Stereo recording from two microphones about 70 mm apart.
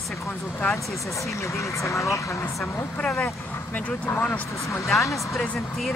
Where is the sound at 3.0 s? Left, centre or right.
Centre.